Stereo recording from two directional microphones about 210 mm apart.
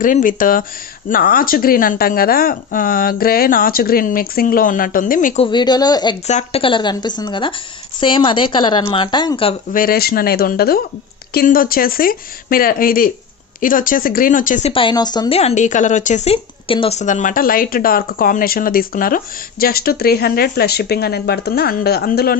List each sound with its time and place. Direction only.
0.0 s speech: 40° left (ahead or behind)
5.4 s a woman's voice: 20° left (ahead or behind)
6.2 s a woman's voice: 30° left (ahead or behind)
9.7 s speech: 45° left (ahead or behind)
14.7 s speech: 25° left (ahead or behind); by 22.4 s 45° left (ahead or behind)